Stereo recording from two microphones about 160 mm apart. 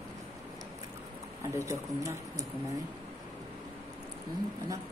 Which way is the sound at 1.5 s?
20° right (ahead or behind).